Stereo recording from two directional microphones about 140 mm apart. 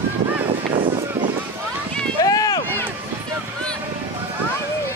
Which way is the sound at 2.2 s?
25° left (ahead or behind).